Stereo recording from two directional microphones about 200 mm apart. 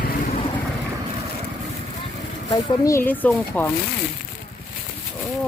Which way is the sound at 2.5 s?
15° left (ahead or behind).